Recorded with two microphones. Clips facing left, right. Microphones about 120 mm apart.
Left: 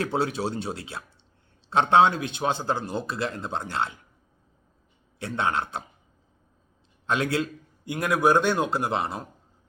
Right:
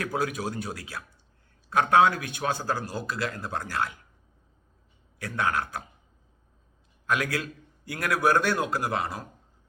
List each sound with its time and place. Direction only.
0.0 s a man's voice: 30° left (ahead or behind)
5.2 s a man's voice: 25° left (ahead or behind)
7.1 s a man's voice: 25° left (ahead or behind)